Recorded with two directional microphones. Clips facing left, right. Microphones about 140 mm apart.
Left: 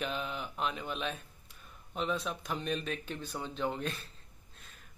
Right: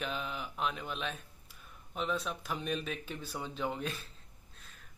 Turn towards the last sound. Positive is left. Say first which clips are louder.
# left 1 dB
turn(degrees=-5)  # may be behind; listen again after turning